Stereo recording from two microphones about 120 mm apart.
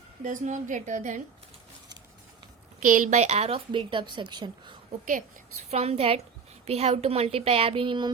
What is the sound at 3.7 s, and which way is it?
A woman's voice, 40° right (ahead or behind).